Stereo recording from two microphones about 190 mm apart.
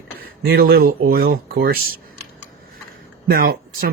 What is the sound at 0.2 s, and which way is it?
Speech, 55° right (ahead or behind).